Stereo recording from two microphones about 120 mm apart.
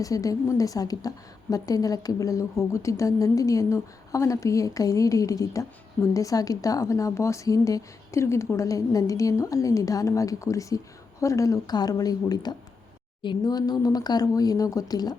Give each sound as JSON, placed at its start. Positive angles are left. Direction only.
{"t": 0.0, "sound": "a woman's voice", "side_deg": 30}